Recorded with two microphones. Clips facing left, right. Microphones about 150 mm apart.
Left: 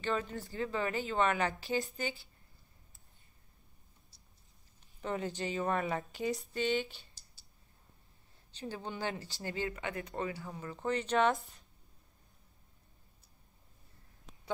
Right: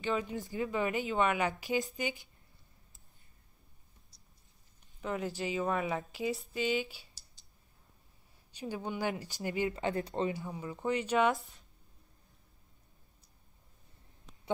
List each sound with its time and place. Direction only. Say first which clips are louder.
0.0 s speech: right 1 dB; 10° right (ahead or behind)
5.0 s a woman's voice: right 1 dB; 5° right (ahead or behind)
8.5 s speech: right 3 dB; 10° right (ahead or behind)
9.8 s speech: right 5 dB; 30° right (ahead or behind)
10.3 s speech: right 3 dB; 15° right (ahead or behind)